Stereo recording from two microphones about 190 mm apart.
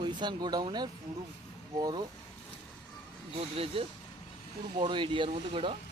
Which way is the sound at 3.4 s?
30° right (ahead or behind).